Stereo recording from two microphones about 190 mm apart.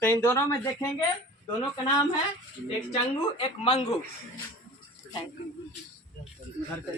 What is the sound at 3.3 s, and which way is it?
Speech, 30° left (ahead or behind).